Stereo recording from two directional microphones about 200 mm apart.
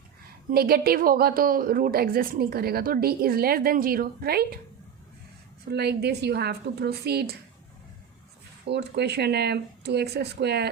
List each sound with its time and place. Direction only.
0.5 s a woman's voice: 50° right (ahead or behind)
5.6 s a woman's voice: 55° right (ahead or behind)
8.6 s speech: 60° right (ahead or behind)